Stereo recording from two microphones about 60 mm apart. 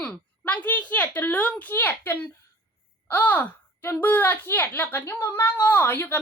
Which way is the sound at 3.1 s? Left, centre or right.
Left.